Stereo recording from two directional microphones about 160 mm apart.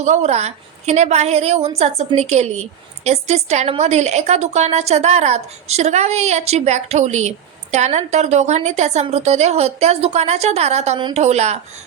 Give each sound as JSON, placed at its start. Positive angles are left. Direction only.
{"t": 0.0, "sound": "a woman's voice", "side_deg": -45}